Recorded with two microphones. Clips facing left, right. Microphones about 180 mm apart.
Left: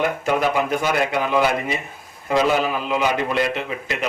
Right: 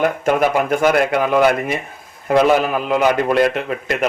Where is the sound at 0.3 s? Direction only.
55° right (ahead or behind).